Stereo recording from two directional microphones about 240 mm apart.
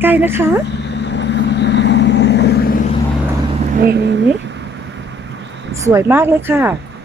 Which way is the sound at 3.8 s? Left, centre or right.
Right.